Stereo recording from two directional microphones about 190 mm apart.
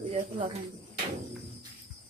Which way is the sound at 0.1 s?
35° right (ahead or behind).